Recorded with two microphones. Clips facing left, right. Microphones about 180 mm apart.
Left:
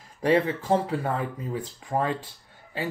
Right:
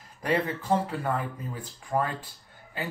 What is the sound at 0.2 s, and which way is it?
Speech, 25° left (ahead or behind).